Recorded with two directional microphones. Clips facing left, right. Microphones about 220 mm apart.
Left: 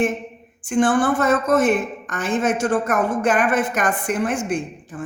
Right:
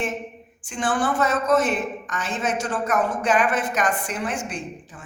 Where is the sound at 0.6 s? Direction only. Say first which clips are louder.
Left 7 dB; 50° left (ahead or behind).